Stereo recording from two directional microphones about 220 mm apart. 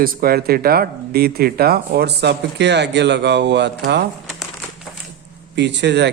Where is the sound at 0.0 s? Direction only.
40° right (ahead or behind).